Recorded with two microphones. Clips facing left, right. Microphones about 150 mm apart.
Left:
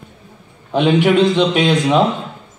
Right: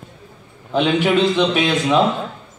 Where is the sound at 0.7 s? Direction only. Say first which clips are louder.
Left 3 dB; 15° left (ahead or behind).